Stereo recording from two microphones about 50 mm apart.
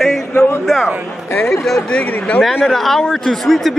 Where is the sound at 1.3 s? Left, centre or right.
Left.